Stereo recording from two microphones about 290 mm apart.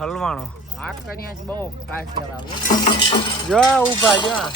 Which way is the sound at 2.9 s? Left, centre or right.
Centre.